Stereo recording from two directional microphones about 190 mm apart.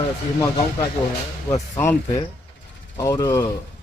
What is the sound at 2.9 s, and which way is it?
Speech, 20° left (ahead or behind).